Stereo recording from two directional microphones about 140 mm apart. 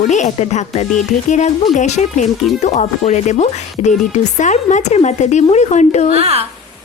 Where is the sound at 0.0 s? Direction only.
60° left (ahead or behind).